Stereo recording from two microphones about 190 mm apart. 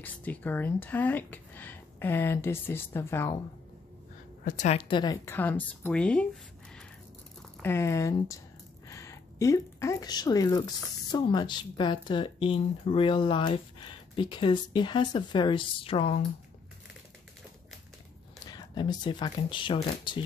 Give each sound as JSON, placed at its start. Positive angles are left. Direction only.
{"t": 0.0, "sound": "speech", "side_deg": 10}
{"t": 4.5, "sound": "a woman's voice", "side_deg": 40}
{"t": 4.7, "sound": "speech", "side_deg": 25}
{"t": 7.6, "sound": "a woman's voice", "side_deg": 15}
{"t": 18.4, "sound": "speech", "side_deg": 20}